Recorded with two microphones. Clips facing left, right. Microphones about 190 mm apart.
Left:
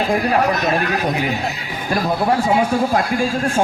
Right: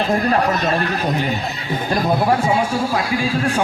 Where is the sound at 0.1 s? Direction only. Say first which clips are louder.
Even; 10° left (ahead or behind).